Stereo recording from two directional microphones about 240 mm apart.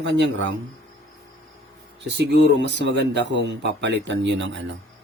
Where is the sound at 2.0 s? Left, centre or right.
Right.